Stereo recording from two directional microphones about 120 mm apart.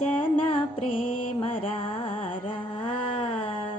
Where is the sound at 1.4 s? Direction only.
50° left (ahead or behind).